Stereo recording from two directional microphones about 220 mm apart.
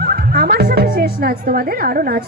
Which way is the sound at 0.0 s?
45° right (ahead or behind).